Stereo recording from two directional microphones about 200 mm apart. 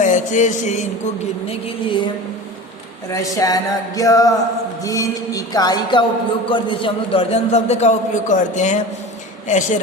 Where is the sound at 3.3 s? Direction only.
20° left (ahead or behind).